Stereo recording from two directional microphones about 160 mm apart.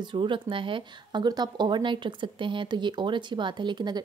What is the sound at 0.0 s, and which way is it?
A woman's voice, 30° right (ahead or behind).